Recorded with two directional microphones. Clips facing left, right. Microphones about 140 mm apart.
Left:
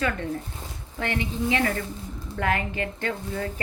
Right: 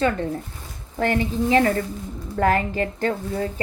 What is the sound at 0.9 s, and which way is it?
Speech, 40° right (ahead or behind).